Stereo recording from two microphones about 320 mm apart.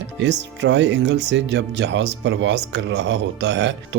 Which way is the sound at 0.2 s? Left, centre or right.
Right.